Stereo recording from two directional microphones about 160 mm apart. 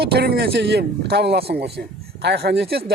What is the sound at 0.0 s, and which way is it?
Speech, 80° right.